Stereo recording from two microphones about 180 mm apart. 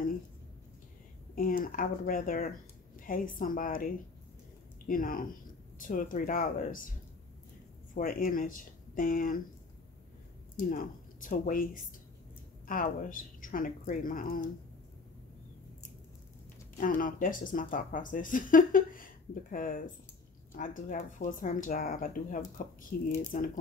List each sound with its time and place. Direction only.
1.3 s speech: 50° left (ahead or behind)
7.9 s speech: 50° left (ahead or behind)
10.7 s speech: 45° left (ahead or behind)
16.7 s speech: 50° left (ahead or behind)